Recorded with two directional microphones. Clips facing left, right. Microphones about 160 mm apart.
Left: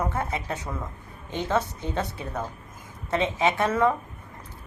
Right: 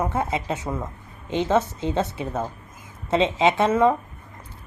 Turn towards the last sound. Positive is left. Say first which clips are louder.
# right 4 dB
turn(degrees=-20)  # may be behind; listen again after turning